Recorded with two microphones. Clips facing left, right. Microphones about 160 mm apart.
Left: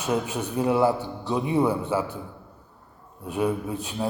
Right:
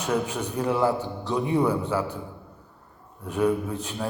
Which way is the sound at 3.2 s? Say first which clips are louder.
Right 2 dB; 20° left (ahead or behind).